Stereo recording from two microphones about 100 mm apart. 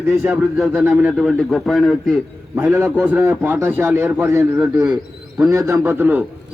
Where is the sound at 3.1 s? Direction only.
25° right (ahead or behind).